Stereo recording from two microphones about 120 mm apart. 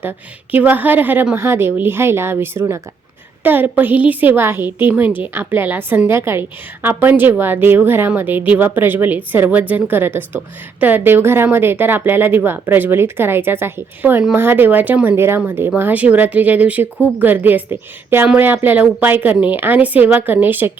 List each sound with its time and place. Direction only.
0.5 s a woman's voice: 15° right (ahead or behind)